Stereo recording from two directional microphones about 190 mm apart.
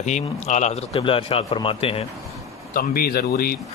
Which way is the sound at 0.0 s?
35° left (ahead or behind).